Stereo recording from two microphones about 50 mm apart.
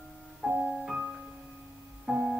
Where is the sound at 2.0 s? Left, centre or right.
Centre.